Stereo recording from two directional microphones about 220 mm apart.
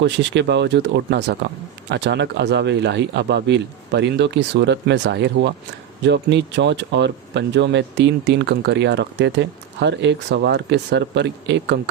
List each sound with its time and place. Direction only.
0.0 s speech: 55° right (ahead or behind)